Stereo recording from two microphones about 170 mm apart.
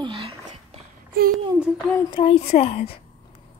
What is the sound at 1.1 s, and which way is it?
Speech, 60° right (ahead or behind).